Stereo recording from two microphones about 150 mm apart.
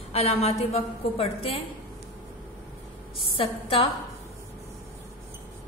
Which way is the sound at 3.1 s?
40° left (ahead or behind).